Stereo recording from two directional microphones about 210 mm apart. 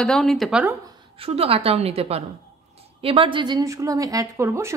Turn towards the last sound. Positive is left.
turn(degrees=-15)  # may be behind; listen again after turning